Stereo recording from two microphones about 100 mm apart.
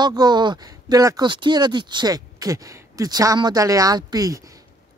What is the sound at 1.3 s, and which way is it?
Speech, 50° right (ahead or behind).